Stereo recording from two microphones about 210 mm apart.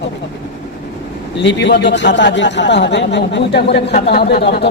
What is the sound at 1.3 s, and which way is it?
A man's voice, 55° left (ahead or behind).